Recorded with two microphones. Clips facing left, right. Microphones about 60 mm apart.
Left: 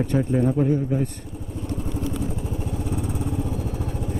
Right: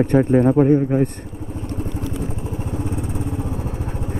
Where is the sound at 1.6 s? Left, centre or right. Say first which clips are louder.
Even; right.